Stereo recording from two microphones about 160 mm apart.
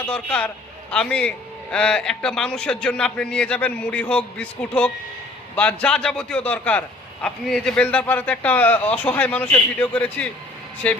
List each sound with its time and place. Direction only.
0.0 s a man's voice: 10° left (ahead or behind)